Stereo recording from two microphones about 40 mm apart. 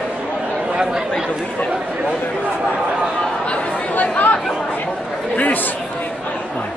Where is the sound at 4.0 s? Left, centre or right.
Left.